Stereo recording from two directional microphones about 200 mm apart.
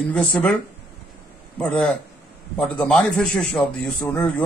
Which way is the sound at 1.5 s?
5° left (ahead or behind).